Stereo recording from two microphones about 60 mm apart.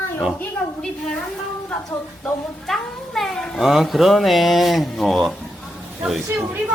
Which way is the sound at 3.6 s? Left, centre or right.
Centre.